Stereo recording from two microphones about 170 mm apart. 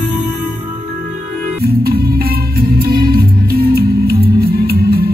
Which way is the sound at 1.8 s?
65° right (ahead or behind).